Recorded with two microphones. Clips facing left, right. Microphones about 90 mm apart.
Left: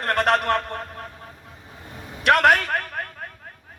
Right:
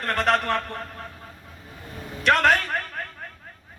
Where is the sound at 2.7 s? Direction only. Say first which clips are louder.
Left 3 dB; 60° left (ahead or behind).